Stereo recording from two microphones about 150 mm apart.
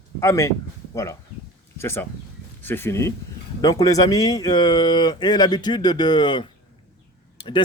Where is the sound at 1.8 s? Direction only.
15° left (ahead or behind).